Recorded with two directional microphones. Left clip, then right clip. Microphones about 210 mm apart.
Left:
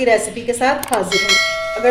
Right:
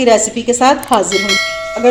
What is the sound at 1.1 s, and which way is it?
Church bell, centre (ahead or behind).